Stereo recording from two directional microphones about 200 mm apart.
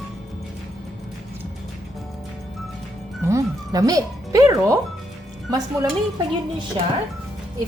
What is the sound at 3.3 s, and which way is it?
Speech, 15° right (ahead or behind).